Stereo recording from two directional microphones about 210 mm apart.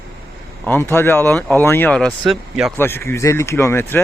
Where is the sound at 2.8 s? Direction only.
10° left (ahead or behind).